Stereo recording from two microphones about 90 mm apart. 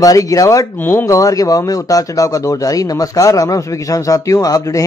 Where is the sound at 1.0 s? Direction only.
40° left (ahead or behind).